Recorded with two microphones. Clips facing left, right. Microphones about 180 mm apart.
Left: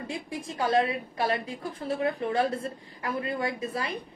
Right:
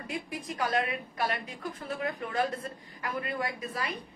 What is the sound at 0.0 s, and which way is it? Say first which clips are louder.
A woman's voice: left 2 dB; 25° left (ahead or behind).